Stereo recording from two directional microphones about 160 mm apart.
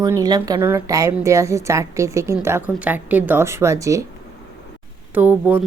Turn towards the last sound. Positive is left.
turn(degrees=-10)  # may be behind; listen again after turning